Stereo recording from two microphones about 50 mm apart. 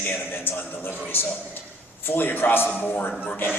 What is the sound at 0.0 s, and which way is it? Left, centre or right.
A man's voice, left.